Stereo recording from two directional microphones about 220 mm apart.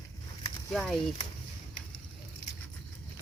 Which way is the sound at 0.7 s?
Centre (ahead or behind).